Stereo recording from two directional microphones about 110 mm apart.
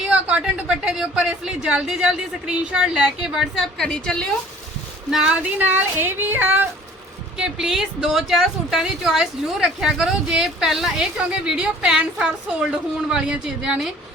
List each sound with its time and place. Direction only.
0.1 s a woman's voice: 10° right (ahead or behind); by 4.3 s 5° left (ahead or behind)
5.1 s a sound: 10° right (ahead or behind)
7.3 s a woman's voice: 5° right (ahead or behind)